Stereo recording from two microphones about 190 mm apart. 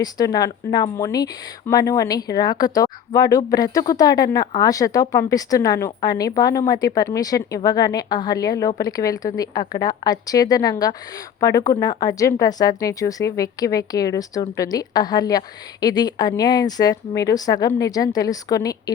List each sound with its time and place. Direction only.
0.0 s speech: 20° left (ahead or behind)